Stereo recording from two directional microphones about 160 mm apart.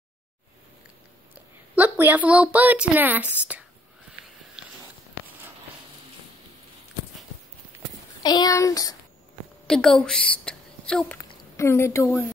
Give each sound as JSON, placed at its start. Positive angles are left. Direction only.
{"t": 1.8, "sound": "a woman's voice", "side_deg": -10}
{"t": 8.2, "sound": "speech", "side_deg": 25}
{"t": 9.7, "sound": "a woman's voice", "side_deg": 5}
{"t": 11.1, "sound": "a sound", "side_deg": 20}